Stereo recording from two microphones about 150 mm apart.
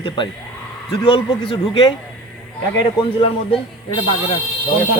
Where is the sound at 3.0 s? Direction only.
35° left (ahead or behind).